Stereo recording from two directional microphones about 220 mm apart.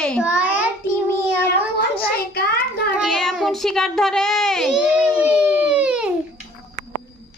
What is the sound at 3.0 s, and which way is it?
A woman's voice, centre (ahead or behind).